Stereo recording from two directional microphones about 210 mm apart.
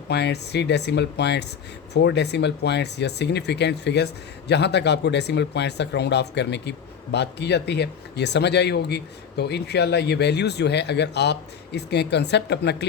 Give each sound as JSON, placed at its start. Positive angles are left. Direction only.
{"t": 0.1, "sound": "speech", "side_deg": 55}